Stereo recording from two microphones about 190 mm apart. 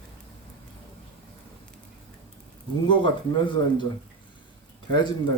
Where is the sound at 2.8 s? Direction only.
25° left (ahead or behind).